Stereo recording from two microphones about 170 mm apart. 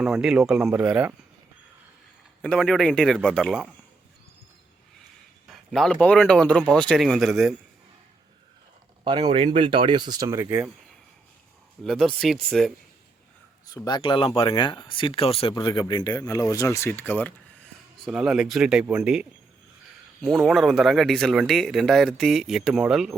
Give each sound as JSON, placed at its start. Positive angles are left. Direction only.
{"t": 0.2, "sound": "speech", "side_deg": 0}
{"t": 2.4, "sound": "speech", "side_deg": 5}
{"t": 5.5, "sound": "speech", "side_deg": 0}
{"t": 9.0, "sound": "speech", "side_deg": -25}
{"t": 11.8, "sound": "speech", "side_deg": 0}
{"t": 13.7, "sound": "speech", "side_deg": 25}
{"t": 18.0, "sound": "speech", "side_deg": -5}